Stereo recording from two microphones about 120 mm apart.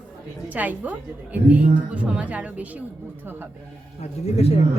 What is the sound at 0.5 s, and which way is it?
A woman's voice, 15° right (ahead or behind).